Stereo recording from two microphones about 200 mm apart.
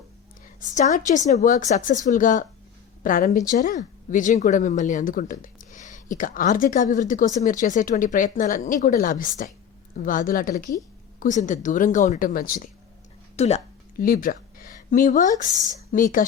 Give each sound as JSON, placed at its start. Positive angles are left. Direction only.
{"t": 0.7, "sound": "a woman's voice", "side_deg": 35}
{"t": 13.3, "sound": "speech", "side_deg": 35}
{"t": 14.0, "sound": "speech", "side_deg": 45}